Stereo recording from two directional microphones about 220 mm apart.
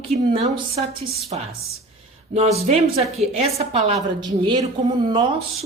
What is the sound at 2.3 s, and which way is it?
Speech, 30° right (ahead or behind).